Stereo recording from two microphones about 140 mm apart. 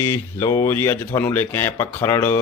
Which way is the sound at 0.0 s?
20° left (ahead or behind).